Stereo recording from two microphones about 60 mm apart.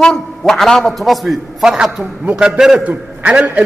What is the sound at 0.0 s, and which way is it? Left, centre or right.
A man's voice, centre.